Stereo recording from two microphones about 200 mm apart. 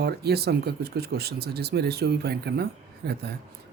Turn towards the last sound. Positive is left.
turn(degrees=-55)  # may be behind; listen again after turning